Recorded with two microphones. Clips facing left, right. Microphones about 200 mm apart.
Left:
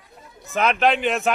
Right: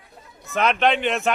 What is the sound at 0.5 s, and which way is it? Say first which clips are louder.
Speech: even; centre (ahead or behind).